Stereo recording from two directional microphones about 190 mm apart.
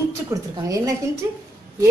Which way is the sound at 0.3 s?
15° right (ahead or behind).